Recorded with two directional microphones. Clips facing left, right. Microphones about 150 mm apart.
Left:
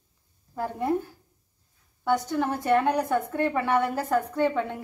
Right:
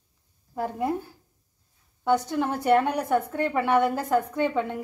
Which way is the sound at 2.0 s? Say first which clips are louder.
Right 1 dB; 15° right (ahead or behind).